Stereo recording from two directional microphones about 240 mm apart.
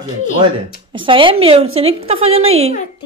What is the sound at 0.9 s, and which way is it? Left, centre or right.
A woman's voice, right.